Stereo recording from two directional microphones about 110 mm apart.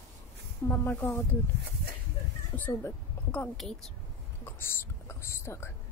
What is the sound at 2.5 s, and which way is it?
A woman's voice, 15° left (ahead or behind).